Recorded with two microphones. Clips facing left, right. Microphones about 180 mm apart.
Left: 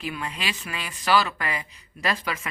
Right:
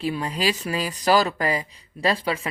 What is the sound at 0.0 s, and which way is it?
A woman's voice, 35° right (ahead or behind).